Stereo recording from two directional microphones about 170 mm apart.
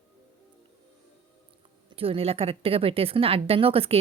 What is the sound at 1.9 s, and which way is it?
A woman's voice, 35° right (ahead or behind).